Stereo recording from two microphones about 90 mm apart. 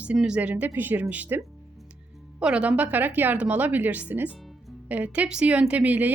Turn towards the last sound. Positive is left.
turn(degrees=-20)  # may be behind; listen again after turning